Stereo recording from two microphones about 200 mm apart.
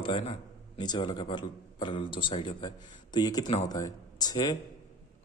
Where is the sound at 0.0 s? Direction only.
30° left (ahead or behind).